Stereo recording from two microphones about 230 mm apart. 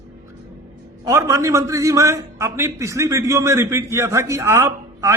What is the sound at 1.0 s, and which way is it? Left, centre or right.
A man's voice, centre.